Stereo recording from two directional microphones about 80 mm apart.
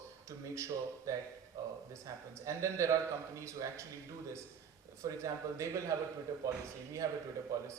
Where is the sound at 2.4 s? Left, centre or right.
Right.